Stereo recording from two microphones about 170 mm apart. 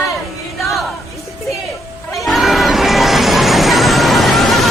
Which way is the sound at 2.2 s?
Centre (ahead or behind).